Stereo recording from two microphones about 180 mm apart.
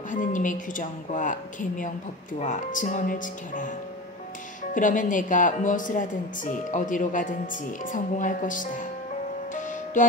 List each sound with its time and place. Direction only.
0.1 s speech: 45° left (ahead or behind)
4.7 s speech: 45° left (ahead or behind)
9.5 s music: 45° left (ahead or behind)